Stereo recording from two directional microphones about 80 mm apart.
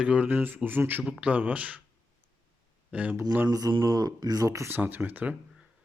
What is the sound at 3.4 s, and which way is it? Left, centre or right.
Speech, right.